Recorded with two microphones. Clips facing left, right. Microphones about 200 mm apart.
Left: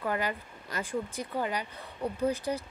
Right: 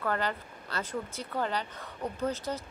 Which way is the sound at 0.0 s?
10° left (ahead or behind).